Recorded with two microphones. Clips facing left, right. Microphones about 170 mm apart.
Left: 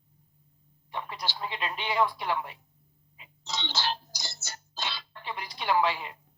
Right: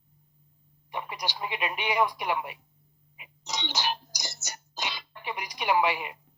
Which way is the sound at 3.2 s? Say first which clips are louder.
Right 1 dB; 15° right (ahead or behind).